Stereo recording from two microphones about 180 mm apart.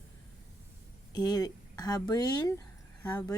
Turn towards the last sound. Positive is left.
turn(degrees=20)  # may be behind; listen again after turning